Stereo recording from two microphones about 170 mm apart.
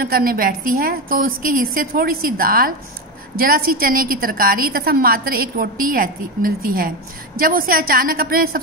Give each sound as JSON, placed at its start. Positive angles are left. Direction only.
{"t": 0.0, "sound": "a woman's voice", "side_deg": -60}